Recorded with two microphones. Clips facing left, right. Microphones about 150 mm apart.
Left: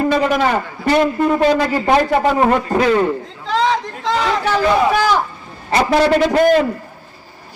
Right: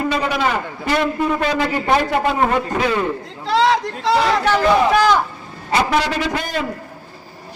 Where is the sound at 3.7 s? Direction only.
5° right (ahead or behind).